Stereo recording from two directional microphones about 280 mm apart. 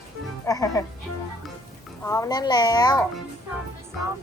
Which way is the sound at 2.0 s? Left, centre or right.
Centre.